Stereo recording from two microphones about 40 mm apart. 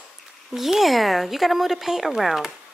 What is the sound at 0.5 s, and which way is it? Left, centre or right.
Speech, centre.